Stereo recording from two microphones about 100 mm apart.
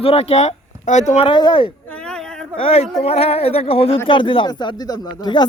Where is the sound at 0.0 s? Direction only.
80° left.